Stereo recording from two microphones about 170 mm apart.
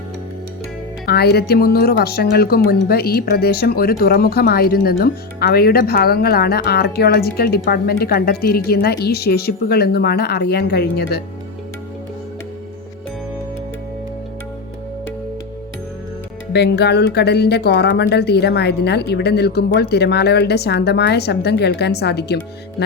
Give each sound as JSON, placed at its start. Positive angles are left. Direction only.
{"t": 1.0, "sound": "speech", "side_deg": 65}
{"t": 16.5, "sound": "speech", "side_deg": 80}